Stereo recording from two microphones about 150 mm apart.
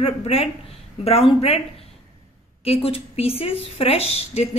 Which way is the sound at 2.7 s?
40° left (ahead or behind).